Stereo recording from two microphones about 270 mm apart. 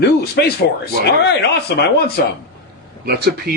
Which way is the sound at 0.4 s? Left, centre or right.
Left.